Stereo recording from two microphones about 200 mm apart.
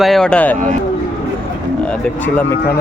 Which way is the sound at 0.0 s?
Centre (ahead or behind).